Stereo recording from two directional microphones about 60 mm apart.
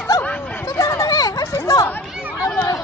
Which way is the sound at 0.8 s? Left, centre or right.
Left.